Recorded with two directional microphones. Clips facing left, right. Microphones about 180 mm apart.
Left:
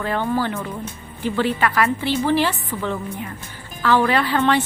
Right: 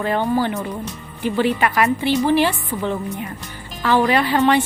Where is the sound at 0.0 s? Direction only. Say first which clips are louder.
Right 3 dB; 20° right (ahead or behind).